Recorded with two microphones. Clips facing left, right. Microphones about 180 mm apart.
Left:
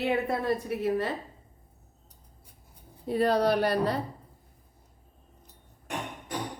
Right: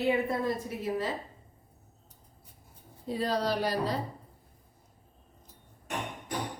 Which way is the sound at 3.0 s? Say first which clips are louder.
Left 6 dB; 60° left (ahead or behind).